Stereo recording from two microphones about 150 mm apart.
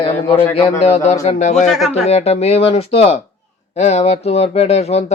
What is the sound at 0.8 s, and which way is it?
Speech, 50° left (ahead or behind).